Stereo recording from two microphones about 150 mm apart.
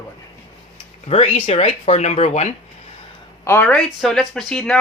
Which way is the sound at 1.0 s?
45° left (ahead or behind).